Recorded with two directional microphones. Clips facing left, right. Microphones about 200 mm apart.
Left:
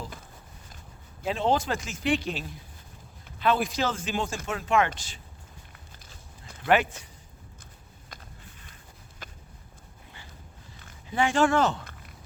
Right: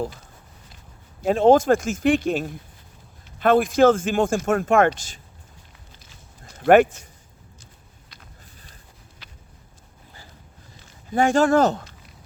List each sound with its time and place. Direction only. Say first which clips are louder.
1.2 s speech: right 10 dB; 45° right (ahead or behind)
6.6 s speech: right 9 dB; 50° right (ahead or behind)
8.1 s a sound: left 2 dB; 50° left (ahead or behind)
11.1 s speech: right 6 dB; 45° right (ahead or behind)